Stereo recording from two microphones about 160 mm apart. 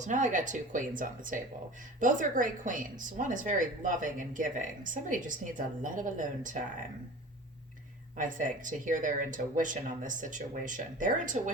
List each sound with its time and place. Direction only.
0.0 s a woman's voice: 50° right (ahead or behind)
8.1 s a woman's voice: 55° right (ahead or behind)